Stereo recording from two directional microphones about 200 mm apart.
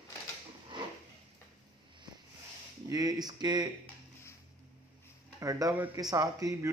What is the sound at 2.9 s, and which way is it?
Speech, 20° right (ahead or behind).